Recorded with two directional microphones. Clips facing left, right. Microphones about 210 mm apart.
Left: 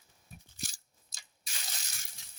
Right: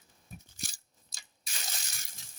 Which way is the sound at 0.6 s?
55° right (ahead or behind).